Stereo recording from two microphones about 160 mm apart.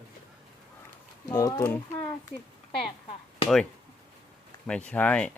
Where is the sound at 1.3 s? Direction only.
25° left (ahead or behind).